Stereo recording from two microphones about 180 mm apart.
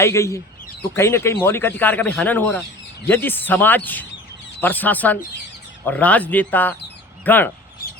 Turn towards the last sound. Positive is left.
turn(degrees=10)  # may be behind; listen again after turning